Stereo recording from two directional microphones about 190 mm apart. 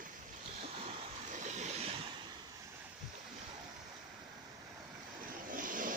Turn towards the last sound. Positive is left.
turn(degrees=-45)  # may be behind; listen again after turning